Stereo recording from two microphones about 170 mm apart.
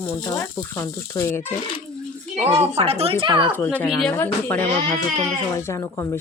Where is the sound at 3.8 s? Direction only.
Centre (ahead or behind).